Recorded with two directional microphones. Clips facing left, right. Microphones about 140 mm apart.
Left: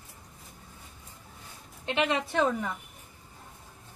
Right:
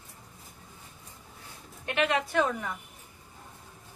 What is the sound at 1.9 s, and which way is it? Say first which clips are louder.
Speech: even; 25° left (ahead or behind).